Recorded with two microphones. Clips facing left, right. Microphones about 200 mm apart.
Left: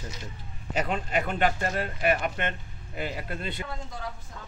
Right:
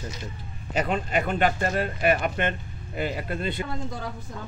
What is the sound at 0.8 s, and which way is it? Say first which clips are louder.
Speech: right 3 dB; 55° right (ahead or behind).